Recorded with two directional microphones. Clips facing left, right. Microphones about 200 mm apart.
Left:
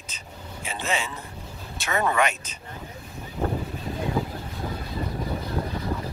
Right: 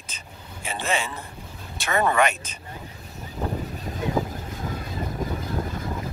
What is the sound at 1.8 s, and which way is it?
Speech, 50° right (ahead or behind).